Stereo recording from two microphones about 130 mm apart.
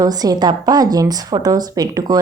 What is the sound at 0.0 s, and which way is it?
A woman's voice, 30° right (ahead or behind).